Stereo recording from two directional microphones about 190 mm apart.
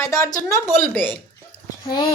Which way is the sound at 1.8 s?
20° left (ahead or behind).